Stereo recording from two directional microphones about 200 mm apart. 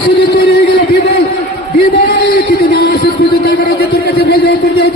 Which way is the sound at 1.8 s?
50° left (ahead or behind).